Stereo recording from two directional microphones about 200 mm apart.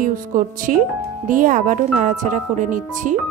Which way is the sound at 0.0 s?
40° right (ahead or behind).